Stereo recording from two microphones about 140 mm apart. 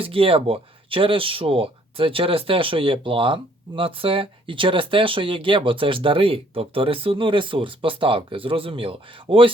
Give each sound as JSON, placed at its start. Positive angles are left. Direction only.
{"t": 0.0, "sound": "speech", "side_deg": -40}